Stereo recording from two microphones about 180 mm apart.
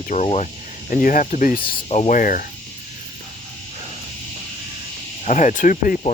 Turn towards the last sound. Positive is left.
turn(degrees=45)  # may be behind; listen again after turning